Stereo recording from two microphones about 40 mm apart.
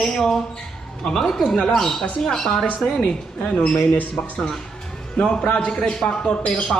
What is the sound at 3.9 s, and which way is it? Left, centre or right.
Speech, left.